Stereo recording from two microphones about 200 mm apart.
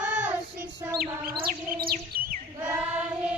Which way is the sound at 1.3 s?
25° right (ahead or behind).